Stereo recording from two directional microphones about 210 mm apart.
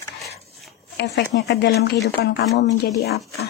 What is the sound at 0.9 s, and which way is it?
Speech, 50° left (ahead or behind).